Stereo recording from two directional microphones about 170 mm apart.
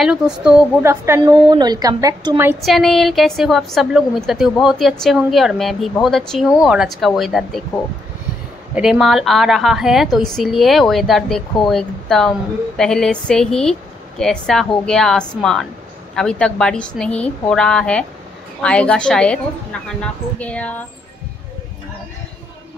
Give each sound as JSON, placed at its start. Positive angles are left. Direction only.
{"t": 0.0, "sound": "a woman's voice", "side_deg": -5}
{"t": 2.6, "sound": "a woman's voice", "side_deg": 0}
{"t": 8.7, "sound": "a woman's voice", "side_deg": -5}